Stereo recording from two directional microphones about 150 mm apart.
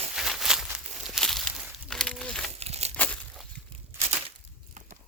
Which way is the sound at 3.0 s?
5° left (ahead or behind).